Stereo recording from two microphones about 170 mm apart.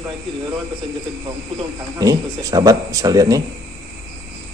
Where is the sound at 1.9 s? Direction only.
20° right (ahead or behind).